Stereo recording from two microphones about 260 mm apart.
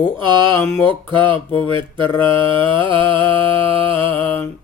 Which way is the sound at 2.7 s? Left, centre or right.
Centre.